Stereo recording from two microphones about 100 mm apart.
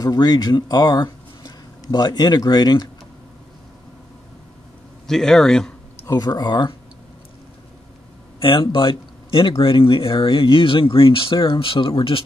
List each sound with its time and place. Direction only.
0.0 s speech: 40° left (ahead or behind)
5.0 s speech: 5° left (ahead or behind)
6.0 s speech: 40° left (ahead or behind)
8.4 s speech: 60° left (ahead or behind)